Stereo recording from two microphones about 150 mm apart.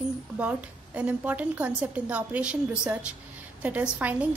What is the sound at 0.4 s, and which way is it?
A woman's voice, 10° right (ahead or behind).